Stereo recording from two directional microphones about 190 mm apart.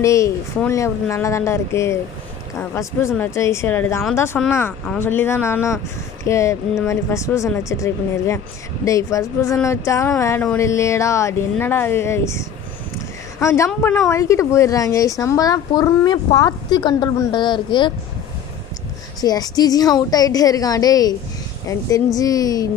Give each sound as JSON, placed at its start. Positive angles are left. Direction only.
{"t": 0.0, "sound": "a woman's voice", "side_deg": 15}
{"t": 19.2, "sound": "a woman's voice", "side_deg": 20}